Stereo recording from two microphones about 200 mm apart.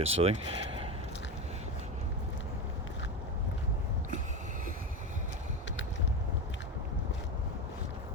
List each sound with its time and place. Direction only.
0.0 s speech: 30° right (ahead or behind)